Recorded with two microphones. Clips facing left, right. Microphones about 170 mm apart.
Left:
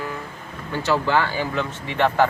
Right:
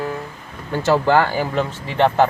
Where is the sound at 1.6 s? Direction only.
25° right (ahead or behind).